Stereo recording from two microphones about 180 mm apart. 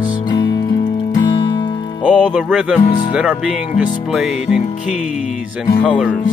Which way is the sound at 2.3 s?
5° right (ahead or behind).